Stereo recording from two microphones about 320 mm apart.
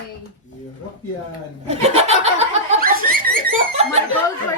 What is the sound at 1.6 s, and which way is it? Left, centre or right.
Laughter, centre.